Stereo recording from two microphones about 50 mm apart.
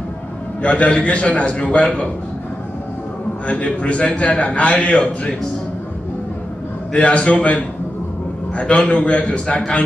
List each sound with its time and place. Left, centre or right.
0.6 s a man's voice: left
3.4 s a man's voice: left
6.9 s a man's voice: left